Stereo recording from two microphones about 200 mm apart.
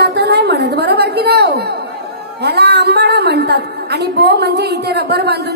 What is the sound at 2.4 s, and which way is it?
A woman's voice, 55° right (ahead or behind).